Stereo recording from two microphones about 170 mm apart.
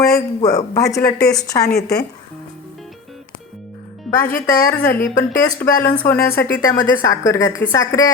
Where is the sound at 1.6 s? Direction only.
70° left (ahead or behind).